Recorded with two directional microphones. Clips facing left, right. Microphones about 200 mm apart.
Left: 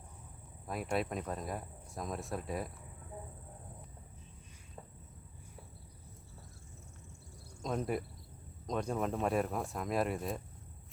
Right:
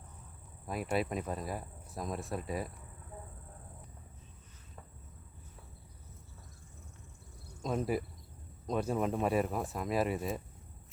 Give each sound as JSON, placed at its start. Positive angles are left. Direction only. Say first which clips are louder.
{"t": 0.7, "sound": "speech", "louder": "right 2 dB", "side_deg": 0}
{"t": 7.6, "sound": "speech", "louder": "right 2 dB", "side_deg": -5}